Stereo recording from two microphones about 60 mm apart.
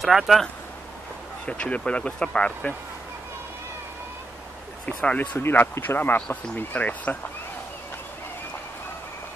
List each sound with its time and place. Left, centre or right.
0.0 s speech: centre
1.4 s speech: left
4.8 s speech: left
5.4 s speech: left